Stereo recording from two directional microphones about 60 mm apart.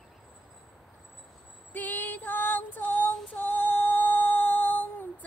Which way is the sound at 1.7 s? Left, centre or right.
Left.